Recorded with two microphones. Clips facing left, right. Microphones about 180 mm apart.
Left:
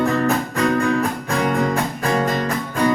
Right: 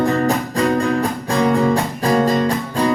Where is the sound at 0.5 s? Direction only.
30° right (ahead or behind).